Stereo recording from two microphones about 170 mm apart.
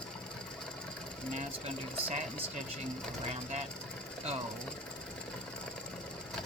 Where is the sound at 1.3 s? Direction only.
40° right (ahead or behind).